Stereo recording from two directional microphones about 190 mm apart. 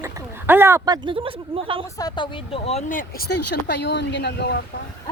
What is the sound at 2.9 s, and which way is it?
A woman's voice, 50° left (ahead or behind).